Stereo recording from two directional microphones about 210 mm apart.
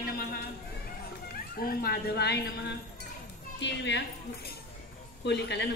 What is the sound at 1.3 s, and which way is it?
A woman's voice, 45° left (ahead or behind).